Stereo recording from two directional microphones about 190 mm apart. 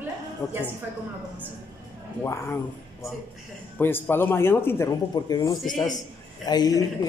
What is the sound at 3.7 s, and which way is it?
A man's voice, 10° left (ahead or behind).